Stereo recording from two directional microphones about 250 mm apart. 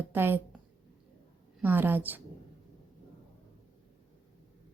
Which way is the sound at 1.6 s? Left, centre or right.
Centre.